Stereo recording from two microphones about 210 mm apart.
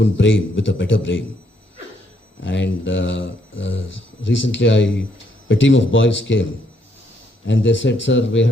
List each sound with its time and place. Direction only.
0.0 s speech: 60° left (ahead or behind)
2.4 s speech: 60° left (ahead or behind)
7.4 s speech: 60° left (ahead or behind)